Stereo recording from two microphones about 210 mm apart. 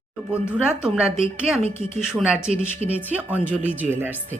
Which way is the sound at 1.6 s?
30° right (ahead or behind).